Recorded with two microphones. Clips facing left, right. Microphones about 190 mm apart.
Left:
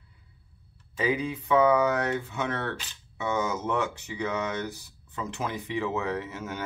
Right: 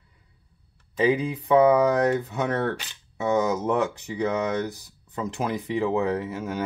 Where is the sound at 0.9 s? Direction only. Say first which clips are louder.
Right 5 dB; 30° right (ahead or behind).